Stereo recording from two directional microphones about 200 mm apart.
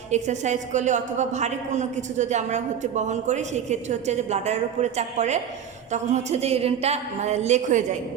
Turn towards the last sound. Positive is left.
turn(degrees=-35)  # may be behind; listen again after turning